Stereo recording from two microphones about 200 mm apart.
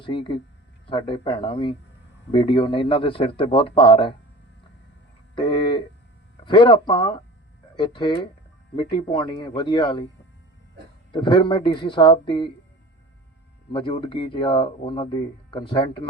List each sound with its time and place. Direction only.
0.0 s speech: 25° left (ahead or behind)
5.3 s speech: 25° left (ahead or behind)
11.1 s speech: 25° left (ahead or behind)
13.7 s speech: 25° left (ahead or behind)